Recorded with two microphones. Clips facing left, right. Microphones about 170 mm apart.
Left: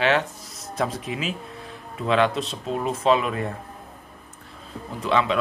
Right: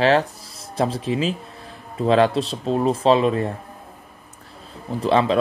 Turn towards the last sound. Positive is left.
turn(degrees=-35)  # may be behind; listen again after turning